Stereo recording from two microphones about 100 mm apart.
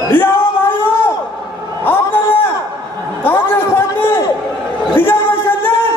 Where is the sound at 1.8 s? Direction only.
20° left (ahead or behind).